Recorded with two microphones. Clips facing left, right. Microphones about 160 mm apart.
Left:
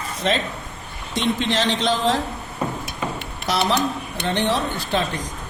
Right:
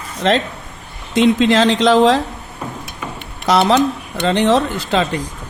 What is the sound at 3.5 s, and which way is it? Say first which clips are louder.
A man's voice: right 8 dB; 90° right.